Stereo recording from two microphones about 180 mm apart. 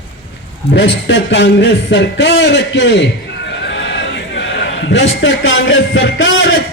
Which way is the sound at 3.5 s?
75° left (ahead or behind).